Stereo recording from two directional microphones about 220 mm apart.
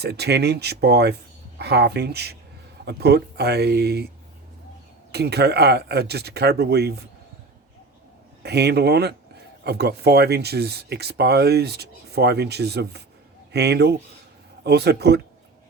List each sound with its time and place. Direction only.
0.0 s speech: 50° right (ahead or behind)
5.1 s speech: 50° right (ahead or behind)
8.4 s speech: 50° right (ahead or behind)